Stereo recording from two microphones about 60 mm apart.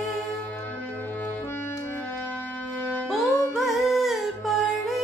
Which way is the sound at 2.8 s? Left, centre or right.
Left.